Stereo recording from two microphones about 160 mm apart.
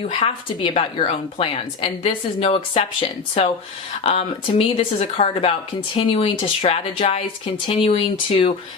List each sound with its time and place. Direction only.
0.0 s speech: 35° left (ahead or behind)